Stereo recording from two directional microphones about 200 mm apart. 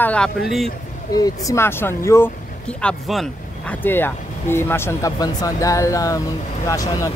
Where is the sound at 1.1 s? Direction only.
15° left (ahead or behind).